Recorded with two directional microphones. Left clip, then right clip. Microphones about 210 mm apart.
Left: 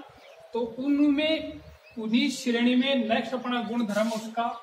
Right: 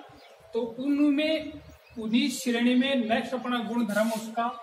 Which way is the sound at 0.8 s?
10° left (ahead or behind).